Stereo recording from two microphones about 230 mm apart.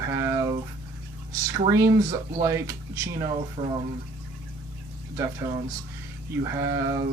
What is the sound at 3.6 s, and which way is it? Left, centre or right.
Speech, right.